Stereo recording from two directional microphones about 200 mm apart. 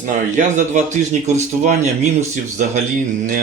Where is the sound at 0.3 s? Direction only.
35° right (ahead or behind).